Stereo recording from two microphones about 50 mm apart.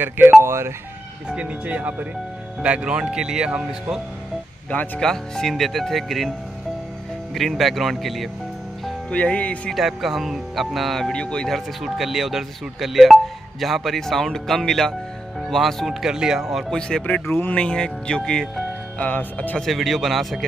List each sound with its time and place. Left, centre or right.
0.4 s speech: right
1.3 s speech: right
2.6 s speech: right
4.6 s speech: left
5.0 s speech: centre
7.3 s speech: centre
9.1 s speech: left
9.8 s speech: centre
11.0 s speech: centre
11.8 s speech: centre
17.0 s speech: left; by 18.5 s centre
18.9 s speech: left
19.6 s speech: centre